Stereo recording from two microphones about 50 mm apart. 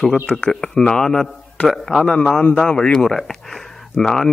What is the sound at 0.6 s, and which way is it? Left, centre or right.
Speech, centre.